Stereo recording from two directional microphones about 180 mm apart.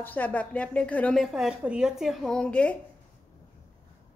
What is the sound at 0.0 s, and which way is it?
A woman's voice, 10° left (ahead or behind).